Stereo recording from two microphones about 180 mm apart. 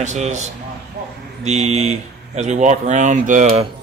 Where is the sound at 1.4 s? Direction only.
35° right (ahead or behind).